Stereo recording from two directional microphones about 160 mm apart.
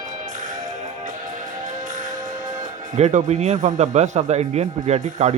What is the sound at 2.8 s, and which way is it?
Speech, 45° right (ahead or behind).